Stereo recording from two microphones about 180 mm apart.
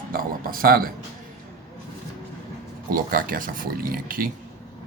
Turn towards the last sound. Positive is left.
turn(degrees=-55)  # may be behind; listen again after turning